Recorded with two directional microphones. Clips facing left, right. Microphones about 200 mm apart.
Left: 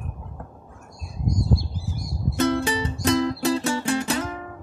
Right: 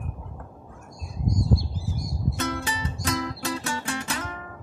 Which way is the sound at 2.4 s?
30° left (ahead or behind).